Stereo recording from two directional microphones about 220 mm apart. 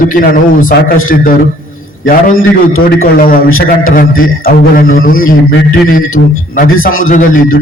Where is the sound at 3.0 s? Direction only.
40° left (ahead or behind).